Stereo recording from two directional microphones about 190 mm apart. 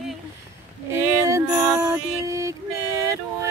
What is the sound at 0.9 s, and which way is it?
Mantra, 15° right (ahead or behind).